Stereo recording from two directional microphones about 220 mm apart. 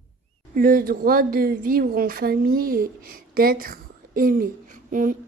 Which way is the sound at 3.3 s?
40° right (ahead or behind).